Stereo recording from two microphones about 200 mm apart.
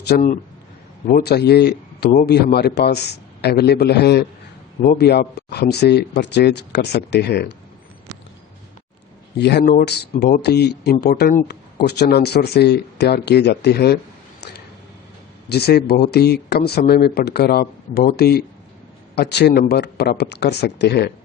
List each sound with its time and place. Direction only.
0.1 s a man's voice: 40° left (ahead or behind); by 7.5 s 55° left (ahead or behind)
9.4 s a man's voice: 55° left (ahead or behind)
14.4 s a sound: 55° left (ahead or behind)
15.4 s a man's voice: 55° left (ahead or behind)